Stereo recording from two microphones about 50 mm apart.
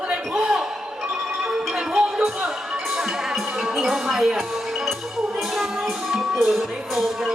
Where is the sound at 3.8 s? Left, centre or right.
Centre.